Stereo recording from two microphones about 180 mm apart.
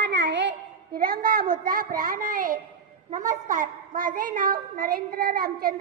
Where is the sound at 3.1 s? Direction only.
45° right (ahead or behind).